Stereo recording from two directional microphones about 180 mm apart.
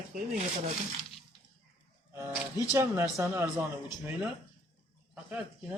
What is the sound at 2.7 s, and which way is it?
Speech, 15° right (ahead or behind).